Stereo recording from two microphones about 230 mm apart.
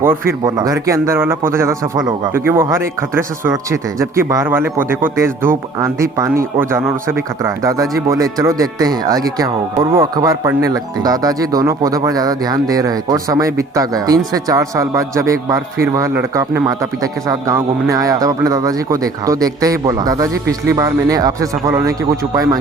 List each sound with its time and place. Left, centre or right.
0.0 s speech: centre